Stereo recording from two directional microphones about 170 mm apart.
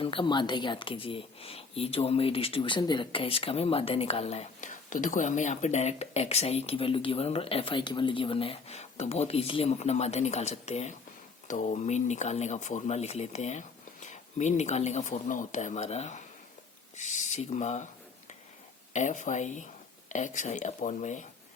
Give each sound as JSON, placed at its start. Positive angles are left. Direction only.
{"t": 0.0, "sound": "speech", "side_deg": 30}
{"t": 18.9, "sound": "speech", "side_deg": 45}